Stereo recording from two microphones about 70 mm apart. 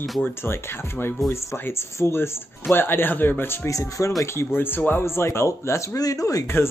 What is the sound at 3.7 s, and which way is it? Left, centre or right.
Speech, left.